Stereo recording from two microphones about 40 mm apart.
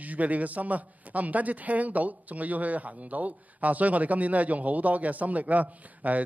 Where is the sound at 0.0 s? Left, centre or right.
Right.